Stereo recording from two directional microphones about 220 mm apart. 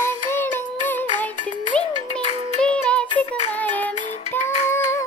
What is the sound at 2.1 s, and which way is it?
Music, 30° left (ahead or behind).